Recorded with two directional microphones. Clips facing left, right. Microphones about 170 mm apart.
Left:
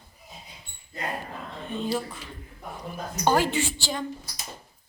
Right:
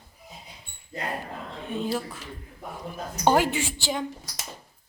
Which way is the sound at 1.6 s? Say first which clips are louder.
Even; 5° right (ahead or behind).